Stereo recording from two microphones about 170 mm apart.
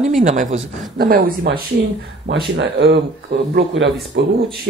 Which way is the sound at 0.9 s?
65° right (ahead or behind).